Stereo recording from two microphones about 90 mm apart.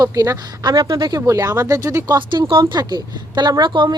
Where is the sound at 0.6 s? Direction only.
50° right (ahead or behind).